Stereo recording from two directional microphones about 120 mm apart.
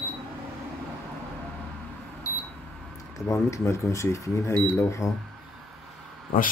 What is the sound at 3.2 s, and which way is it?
Speech, 25° left (ahead or behind).